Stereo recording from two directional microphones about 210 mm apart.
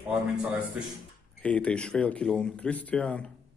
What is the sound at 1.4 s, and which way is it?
A man's voice, 5° left (ahead or behind).